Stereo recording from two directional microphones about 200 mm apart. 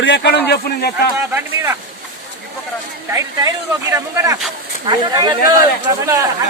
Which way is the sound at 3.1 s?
15° right (ahead or behind).